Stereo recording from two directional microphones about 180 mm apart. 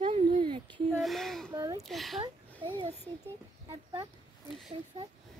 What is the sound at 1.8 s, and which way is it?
Speech, centre (ahead or behind).